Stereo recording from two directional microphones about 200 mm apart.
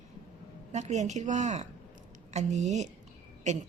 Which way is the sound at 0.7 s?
35° right (ahead or behind).